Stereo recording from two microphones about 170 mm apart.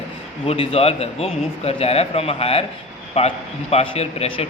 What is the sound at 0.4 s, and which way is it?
A man's voice, 35° left (ahead or behind).